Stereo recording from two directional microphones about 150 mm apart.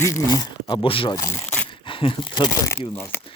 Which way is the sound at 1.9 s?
35° left (ahead or behind).